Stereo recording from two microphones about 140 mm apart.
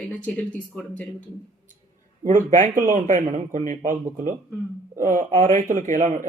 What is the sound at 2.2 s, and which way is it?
A man's voice, 70° right (ahead or behind).